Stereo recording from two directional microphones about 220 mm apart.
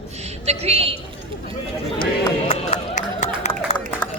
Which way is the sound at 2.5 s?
30° left (ahead or behind).